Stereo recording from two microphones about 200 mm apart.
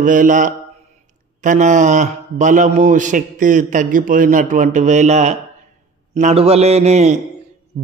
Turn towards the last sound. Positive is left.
turn(degrees=-35)  # may be behind; listen again after turning